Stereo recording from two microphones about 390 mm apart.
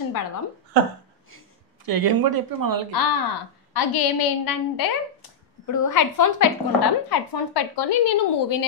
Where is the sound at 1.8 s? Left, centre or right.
Right.